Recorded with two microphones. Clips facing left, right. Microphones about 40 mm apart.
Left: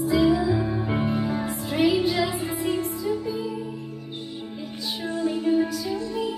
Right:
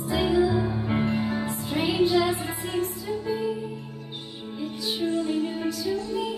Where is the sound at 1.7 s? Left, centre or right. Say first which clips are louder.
Left 4 dB; right.